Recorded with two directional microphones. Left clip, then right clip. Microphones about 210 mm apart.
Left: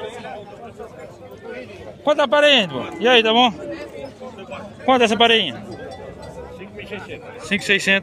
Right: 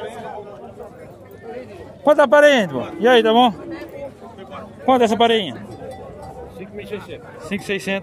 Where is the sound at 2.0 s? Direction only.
25° right (ahead or behind).